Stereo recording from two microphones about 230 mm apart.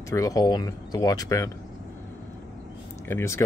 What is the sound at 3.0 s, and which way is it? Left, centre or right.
Speech, centre.